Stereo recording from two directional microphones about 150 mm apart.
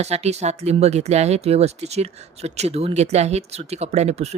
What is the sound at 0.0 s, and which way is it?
Speech, 45° right (ahead or behind).